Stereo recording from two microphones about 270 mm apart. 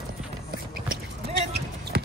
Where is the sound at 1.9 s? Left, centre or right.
Right.